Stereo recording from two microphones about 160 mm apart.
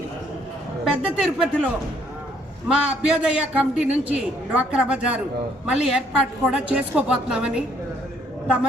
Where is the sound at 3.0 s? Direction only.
5° right (ahead or behind).